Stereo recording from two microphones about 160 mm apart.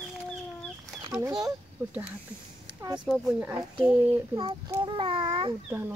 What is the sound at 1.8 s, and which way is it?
Speech, 15° right (ahead or behind).